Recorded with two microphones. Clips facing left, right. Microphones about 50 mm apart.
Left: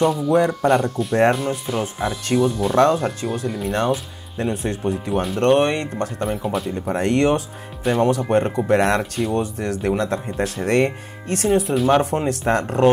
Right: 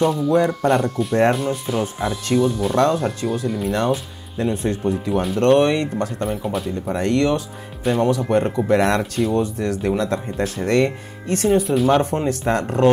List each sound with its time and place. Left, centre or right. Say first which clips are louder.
0.0 s speech: even; centre
6.9 s speech: left 1 dB; centre
7.8 s speech: even; centre